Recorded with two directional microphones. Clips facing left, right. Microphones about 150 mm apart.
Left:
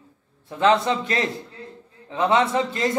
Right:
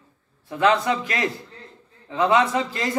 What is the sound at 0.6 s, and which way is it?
A man's voice, 25° left (ahead or behind).